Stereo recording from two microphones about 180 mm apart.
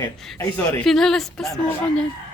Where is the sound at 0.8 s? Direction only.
Centre (ahead or behind).